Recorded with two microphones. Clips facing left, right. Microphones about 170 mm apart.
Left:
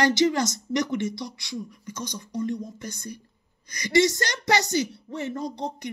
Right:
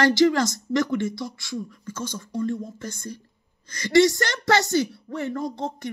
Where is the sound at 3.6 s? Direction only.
15° left (ahead or behind).